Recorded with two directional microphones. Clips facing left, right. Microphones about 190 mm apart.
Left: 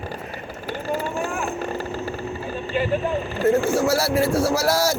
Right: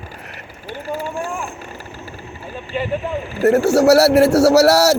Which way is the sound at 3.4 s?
75° right (ahead or behind).